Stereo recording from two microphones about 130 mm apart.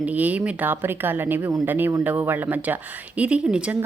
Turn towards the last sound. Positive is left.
turn(degrees=-10)  # may be behind; listen again after turning